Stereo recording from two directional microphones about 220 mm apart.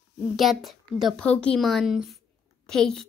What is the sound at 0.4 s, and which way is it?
A woman's voice, centre (ahead or behind).